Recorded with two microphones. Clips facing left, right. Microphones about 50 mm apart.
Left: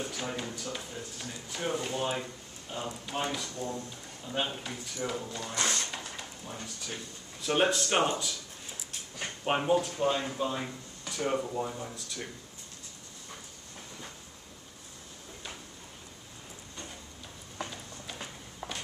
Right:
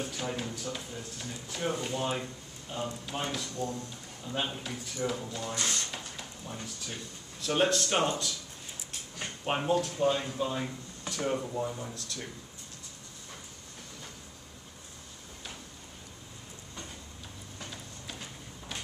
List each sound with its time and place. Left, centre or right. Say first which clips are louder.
0.1 s speech: right 1 dB; centre
5.5 s speech: left 3 dB; left
5.9 s speech: left 1 dB; centre